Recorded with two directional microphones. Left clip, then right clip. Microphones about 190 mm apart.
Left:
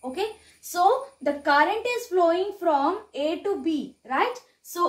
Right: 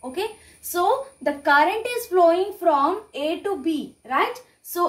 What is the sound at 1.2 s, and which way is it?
Speech, 15° left (ahead or behind).